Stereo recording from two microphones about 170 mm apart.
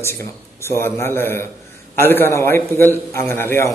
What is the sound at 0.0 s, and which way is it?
A man's voice, 15° left (ahead or behind).